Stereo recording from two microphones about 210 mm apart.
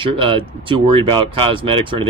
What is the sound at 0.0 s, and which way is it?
Speech, 25° right (ahead or behind).